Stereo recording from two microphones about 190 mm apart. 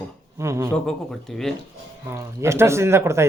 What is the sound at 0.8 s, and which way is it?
Speech, centre (ahead or behind).